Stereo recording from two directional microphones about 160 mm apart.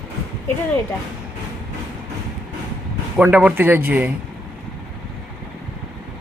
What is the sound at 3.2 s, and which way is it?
Speech, 10° right (ahead or behind).